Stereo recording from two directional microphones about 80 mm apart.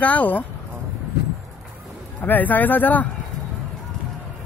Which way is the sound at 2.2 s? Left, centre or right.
Left.